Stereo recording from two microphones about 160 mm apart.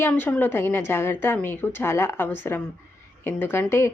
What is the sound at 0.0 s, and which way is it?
Speech, 10° left (ahead or behind).